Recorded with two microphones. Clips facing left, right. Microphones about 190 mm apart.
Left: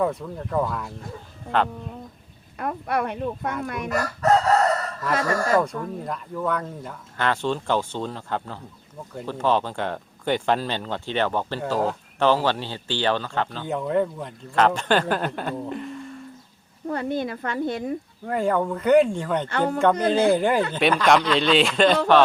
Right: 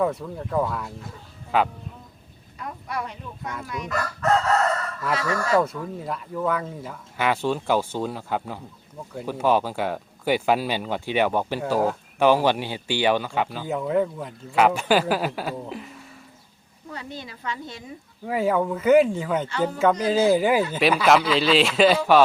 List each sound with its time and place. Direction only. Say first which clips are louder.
0.0 s speech: even; centre (ahead or behind)
2.6 s speech: left 6 dB; 60° left (ahead or behind)
3.7 s crowing: left 3 dB; 50° left (ahead or behind)
5.1 s crowing: left 3 dB; 50° left (ahead or behind)
5.5 s speech: even; 5° right (ahead or behind)
16.9 s speech: left 11 dB; 55° left (ahead or behind)
18.3 s speech: even; 5° right (ahead or behind)
19.5 s speech: left 2 dB; 55° left (ahead or behind)
20.3 s speech: right 1 dB; 5° right (ahead or behind)